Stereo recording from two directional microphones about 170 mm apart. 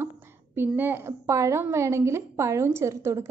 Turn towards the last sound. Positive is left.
turn(degrees=-15)  # may be behind; listen again after turning